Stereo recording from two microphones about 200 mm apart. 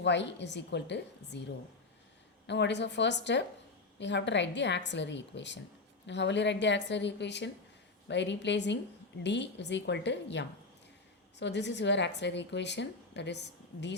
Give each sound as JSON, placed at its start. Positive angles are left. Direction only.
{"t": 0.0, "sound": "a woman's voice", "side_deg": 60}